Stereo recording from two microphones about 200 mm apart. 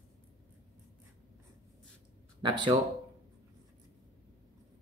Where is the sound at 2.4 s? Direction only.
25° right (ahead or behind).